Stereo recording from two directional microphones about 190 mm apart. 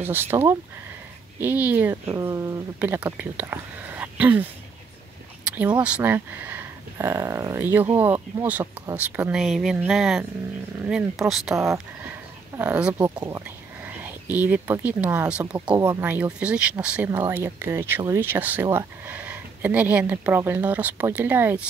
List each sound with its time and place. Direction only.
0.0 s speech: 10° right (ahead or behind)
11.5 s speech: 15° right (ahead or behind)
15.5 s speech: 25° right (ahead or behind)
15.8 s speech: 10° right (ahead or behind)